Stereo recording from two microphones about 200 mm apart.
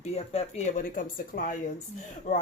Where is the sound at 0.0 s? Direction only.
30° left (ahead or behind).